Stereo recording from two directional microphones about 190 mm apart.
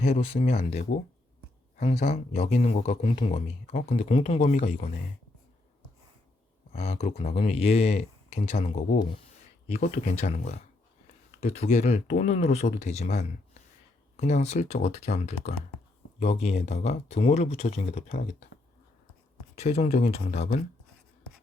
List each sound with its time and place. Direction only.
0.1 s speech: 30° left (ahead or behind)
1.7 s speech: 35° left (ahead or behind)
3.1 s speech: 30° left (ahead or behind)
6.7 s speech: 35° left (ahead or behind)
19.5 s speech: 35° left (ahead or behind)